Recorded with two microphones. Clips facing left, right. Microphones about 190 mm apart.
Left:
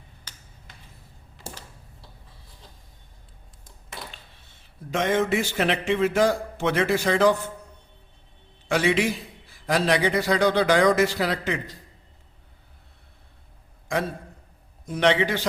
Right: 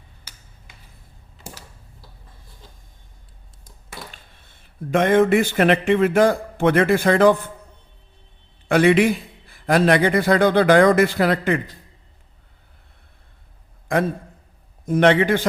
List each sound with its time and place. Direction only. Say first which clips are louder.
4.1 s speech: even; 50° right (ahead or behind)
8.6 s a man's voice: right 7 dB; 55° right (ahead or behind)
13.9 s a man's voice: right 6 dB; 55° right (ahead or behind)